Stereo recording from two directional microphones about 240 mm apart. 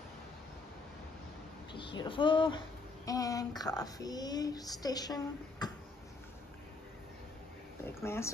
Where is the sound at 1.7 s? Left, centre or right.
Centre.